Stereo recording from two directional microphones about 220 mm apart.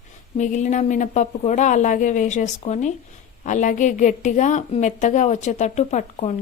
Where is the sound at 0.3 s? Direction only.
35° left (ahead or behind).